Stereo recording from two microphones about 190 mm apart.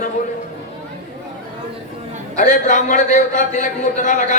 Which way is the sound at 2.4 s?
45° left (ahead or behind).